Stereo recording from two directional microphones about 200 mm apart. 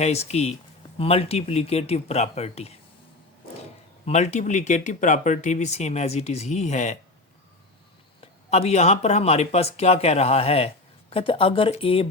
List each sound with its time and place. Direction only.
0.0 s speech: 30° left (ahead or behind)
4.0 s speech: 35° left (ahead or behind)
8.2 s speech: 30° left (ahead or behind)